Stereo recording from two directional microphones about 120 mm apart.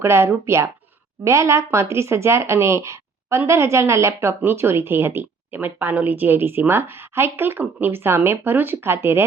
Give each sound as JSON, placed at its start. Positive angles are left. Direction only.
{"t": 0.0, "sound": "speech", "side_deg": -20}